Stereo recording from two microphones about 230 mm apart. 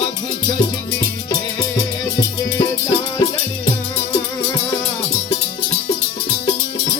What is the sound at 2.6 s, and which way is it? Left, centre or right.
Music, centre.